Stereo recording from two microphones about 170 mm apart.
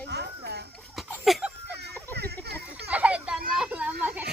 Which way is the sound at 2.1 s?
75° right (ahead or behind).